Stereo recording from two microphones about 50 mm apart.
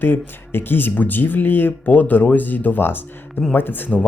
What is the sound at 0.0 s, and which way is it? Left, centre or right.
Speech, left.